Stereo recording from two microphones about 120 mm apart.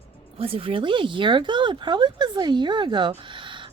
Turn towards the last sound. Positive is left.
turn(degrees=-45)  # may be behind; listen again after turning